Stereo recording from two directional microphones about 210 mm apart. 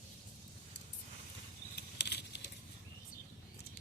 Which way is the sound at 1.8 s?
50° left (ahead or behind).